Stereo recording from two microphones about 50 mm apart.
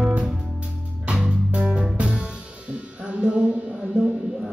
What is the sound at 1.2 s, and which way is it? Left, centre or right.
Music, right.